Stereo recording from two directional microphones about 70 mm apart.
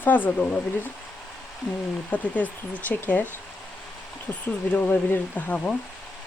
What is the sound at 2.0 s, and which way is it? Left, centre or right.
Speech, left.